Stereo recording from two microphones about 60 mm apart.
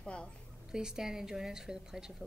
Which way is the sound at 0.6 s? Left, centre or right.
Centre.